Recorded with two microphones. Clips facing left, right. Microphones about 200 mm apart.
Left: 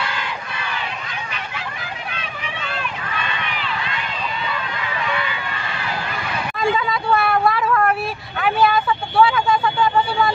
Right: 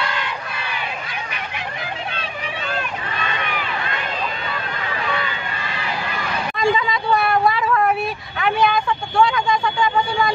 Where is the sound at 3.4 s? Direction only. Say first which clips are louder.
Right 1 dB; 45° right (ahead or behind).